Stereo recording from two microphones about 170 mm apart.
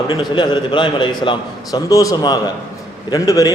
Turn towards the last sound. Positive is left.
turn(degrees=20)  # may be behind; listen again after turning